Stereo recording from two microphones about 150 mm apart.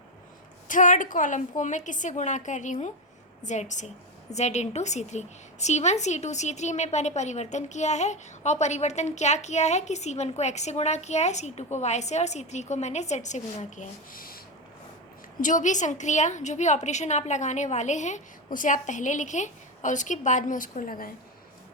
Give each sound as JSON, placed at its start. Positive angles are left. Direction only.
{"t": 0.7, "sound": "a woman's voice", "side_deg": 60}
{"t": 15.4, "sound": "a woman's voice", "side_deg": 60}